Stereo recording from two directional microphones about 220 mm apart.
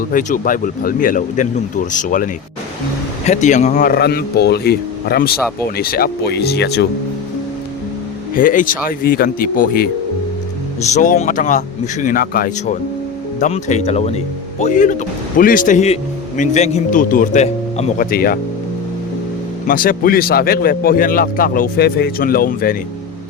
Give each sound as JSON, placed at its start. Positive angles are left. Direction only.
{"t": 0.1, "sound": "speech", "side_deg": 35}
{"t": 8.4, "sound": "speech", "side_deg": 40}
{"t": 10.9, "sound": "speech", "side_deg": 35}
{"t": 19.6, "sound": "speech", "side_deg": 40}